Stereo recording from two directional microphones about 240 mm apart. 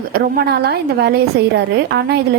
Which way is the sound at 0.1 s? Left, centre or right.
Right.